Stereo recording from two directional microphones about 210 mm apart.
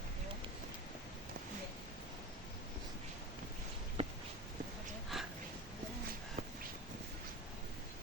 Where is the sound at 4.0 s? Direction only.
25° right (ahead or behind).